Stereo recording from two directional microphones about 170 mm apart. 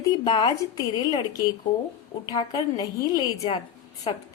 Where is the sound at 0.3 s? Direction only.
30° left (ahead or behind).